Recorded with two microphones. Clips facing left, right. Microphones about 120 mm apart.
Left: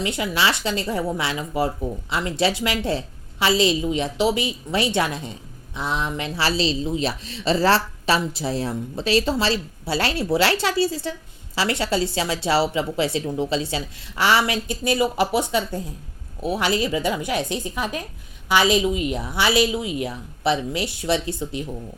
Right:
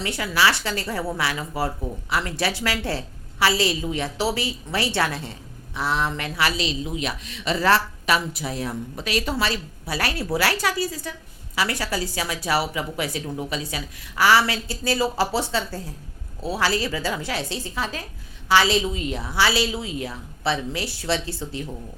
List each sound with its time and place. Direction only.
0.0 s a woman's voice: 20° left (ahead or behind)